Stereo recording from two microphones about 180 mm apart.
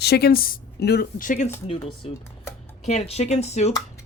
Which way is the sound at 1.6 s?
30° left (ahead or behind).